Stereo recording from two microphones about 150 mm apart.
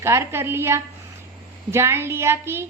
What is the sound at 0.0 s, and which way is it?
A woman's voice, 20° right (ahead or behind).